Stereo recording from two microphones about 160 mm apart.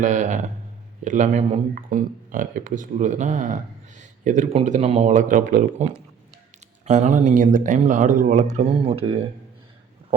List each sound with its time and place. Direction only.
0.0 s speech: 50° right (ahead or behind)
8.8 s speech: 35° right (ahead or behind)